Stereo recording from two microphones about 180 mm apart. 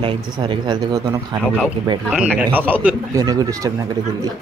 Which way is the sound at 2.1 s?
5° right (ahead or behind).